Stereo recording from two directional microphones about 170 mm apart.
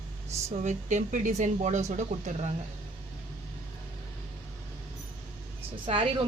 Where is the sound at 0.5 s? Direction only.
45° right (ahead or behind).